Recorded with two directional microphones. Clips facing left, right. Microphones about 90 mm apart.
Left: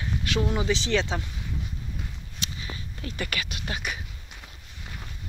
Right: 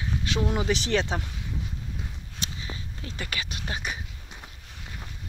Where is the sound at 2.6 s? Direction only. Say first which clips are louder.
Left 1 dB; 20° right (ahead or behind).